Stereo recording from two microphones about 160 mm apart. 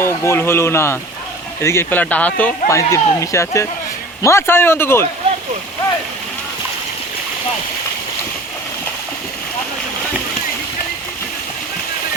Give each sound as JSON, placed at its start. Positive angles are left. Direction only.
{"t": 0.0, "sound": "speech", "side_deg": 15}